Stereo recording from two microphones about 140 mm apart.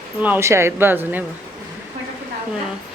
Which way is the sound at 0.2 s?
15° right (ahead or behind).